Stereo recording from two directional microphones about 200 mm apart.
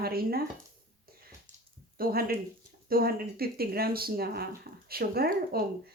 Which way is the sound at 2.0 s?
50° right (ahead or behind).